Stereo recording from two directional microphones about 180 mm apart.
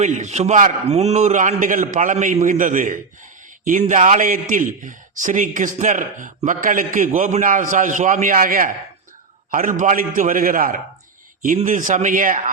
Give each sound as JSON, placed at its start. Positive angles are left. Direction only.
{"t": 0.0, "sound": "a man's voice", "side_deg": -40}